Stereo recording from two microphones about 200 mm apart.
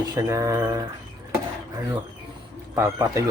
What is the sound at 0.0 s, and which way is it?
Speech, 15° right (ahead or behind).